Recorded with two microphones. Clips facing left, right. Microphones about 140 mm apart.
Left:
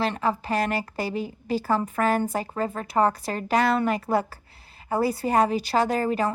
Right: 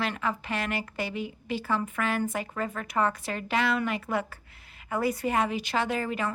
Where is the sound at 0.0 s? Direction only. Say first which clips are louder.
Left 5 dB; 35° left (ahead or behind).